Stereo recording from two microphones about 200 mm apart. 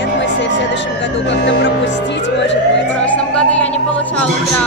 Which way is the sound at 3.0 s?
5° left (ahead or behind).